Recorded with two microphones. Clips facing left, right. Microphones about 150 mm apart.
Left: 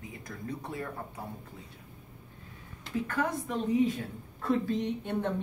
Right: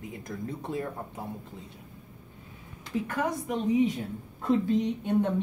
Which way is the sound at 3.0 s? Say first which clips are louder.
Right 1 dB; 10° right (ahead or behind).